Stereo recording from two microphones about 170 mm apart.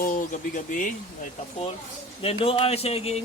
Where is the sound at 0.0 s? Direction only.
55° left (ahead or behind).